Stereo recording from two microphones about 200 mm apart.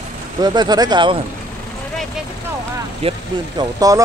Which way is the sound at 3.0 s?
25° right (ahead or behind).